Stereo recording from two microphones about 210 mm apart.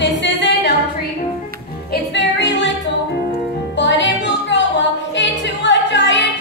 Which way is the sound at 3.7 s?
60° left (ahead or behind).